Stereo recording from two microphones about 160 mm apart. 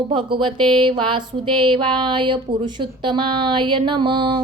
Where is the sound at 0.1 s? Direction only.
30° right (ahead or behind).